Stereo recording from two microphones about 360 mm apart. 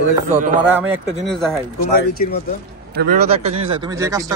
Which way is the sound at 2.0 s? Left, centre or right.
Left.